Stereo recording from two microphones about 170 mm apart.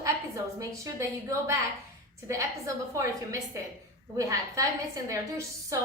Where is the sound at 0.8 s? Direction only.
15° right (ahead or behind).